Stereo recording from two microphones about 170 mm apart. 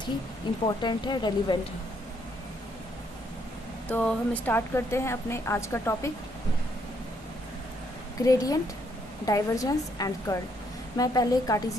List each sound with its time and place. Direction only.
0.4 s a woman's voice: 25° left (ahead or behind)
3.8 s speech: 10° left (ahead or behind)
8.2 s a woman's voice: 20° left (ahead or behind)